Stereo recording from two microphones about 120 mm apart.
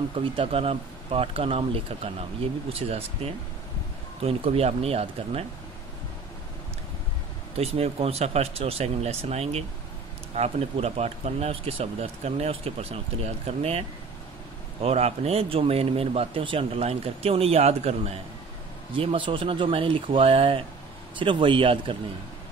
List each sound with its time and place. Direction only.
0.2 s speech: 50° right (ahead or behind)
7.5 s speech: 60° right (ahead or behind)
18.9 s speech: 45° right (ahead or behind)